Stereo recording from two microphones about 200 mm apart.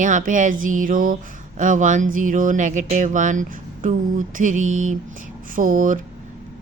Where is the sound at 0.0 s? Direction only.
40° right (ahead or behind).